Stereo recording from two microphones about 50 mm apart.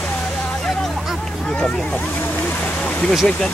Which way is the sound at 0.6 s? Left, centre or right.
Centre.